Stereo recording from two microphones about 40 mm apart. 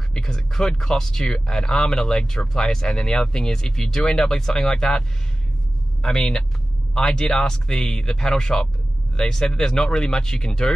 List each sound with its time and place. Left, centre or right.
0.1 s speech: centre
6.0 s speech: centre